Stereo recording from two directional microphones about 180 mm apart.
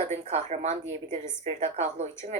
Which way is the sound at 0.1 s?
40° right (ahead or behind).